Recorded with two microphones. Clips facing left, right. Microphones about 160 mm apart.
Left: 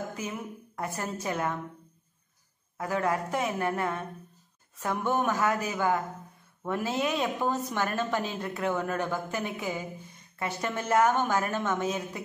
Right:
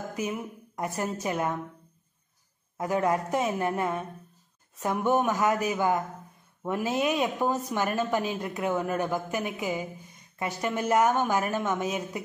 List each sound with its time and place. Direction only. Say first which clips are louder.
0.2 s a woman's voice: right 4 dB; 15° right (ahead or behind)
2.8 s a woman's voice: right 3 dB; 20° right (ahead or behind)